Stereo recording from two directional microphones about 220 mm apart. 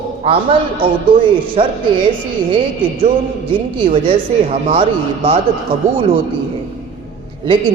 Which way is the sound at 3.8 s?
25° right (ahead or behind).